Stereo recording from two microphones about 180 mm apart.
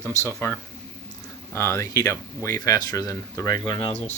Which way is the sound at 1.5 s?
15° left (ahead or behind).